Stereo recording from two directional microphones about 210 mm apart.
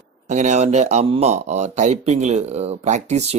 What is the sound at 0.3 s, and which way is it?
A woman's voice, 35° right (ahead or behind).